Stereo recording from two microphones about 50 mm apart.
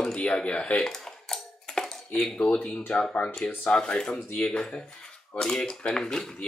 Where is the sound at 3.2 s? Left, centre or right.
Left.